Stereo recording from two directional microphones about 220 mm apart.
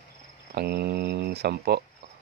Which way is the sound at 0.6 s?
45° right (ahead or behind).